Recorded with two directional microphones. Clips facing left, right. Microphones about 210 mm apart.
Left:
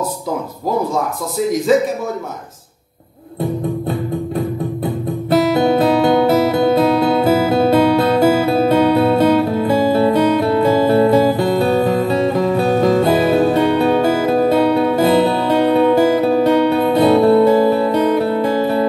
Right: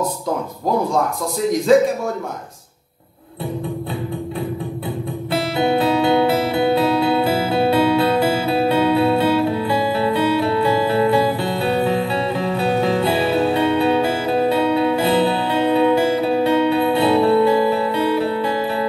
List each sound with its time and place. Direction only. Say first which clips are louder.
1.7 s a man's voice: right 1 dB; 5° left (ahead or behind)
4.4 s music: left 5 dB; 40° left (ahead or behind)